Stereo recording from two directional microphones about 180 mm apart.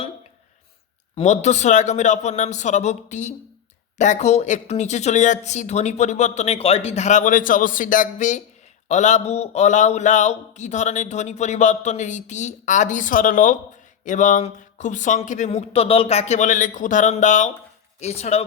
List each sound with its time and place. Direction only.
1.1 s a man's voice: 40° left (ahead or behind)